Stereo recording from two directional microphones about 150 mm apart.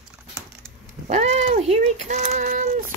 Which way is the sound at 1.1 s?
45° right (ahead or behind).